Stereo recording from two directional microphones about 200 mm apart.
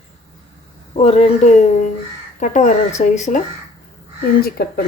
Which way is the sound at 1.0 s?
30° left (ahead or behind).